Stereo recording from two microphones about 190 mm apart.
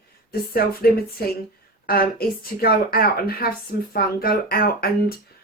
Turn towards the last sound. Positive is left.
turn(degrees=50)  # may be behind; listen again after turning